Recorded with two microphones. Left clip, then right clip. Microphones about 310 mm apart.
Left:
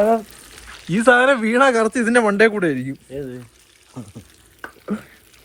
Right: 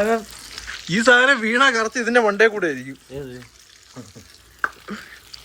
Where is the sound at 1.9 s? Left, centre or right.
Left.